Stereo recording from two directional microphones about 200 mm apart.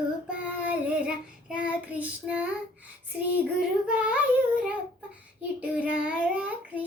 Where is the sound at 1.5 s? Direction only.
5° right (ahead or behind).